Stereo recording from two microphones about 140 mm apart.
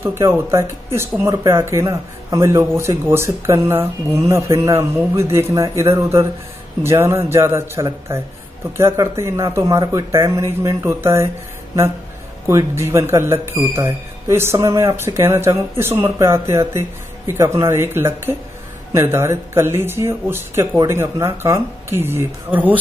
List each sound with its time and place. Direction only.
0.0 s speech: 20° right (ahead or behind)
12.4 s speech: 20° right (ahead or behind)